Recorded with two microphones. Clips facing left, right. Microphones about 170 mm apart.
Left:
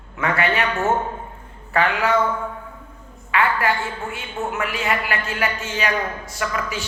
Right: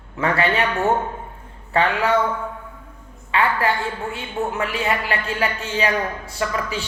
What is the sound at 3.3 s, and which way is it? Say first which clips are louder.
A woman's voice: even; 30° right (ahead or behind).